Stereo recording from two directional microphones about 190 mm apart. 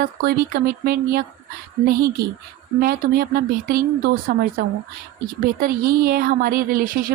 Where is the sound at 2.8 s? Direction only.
55° right (ahead or behind).